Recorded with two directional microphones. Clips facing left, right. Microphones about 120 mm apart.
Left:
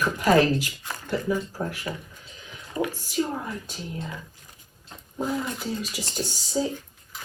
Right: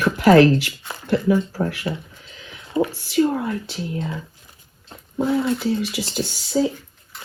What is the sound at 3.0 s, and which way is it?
Speech, 90° right.